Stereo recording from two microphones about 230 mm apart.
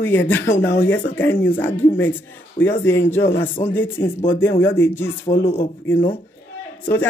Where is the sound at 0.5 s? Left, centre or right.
Left.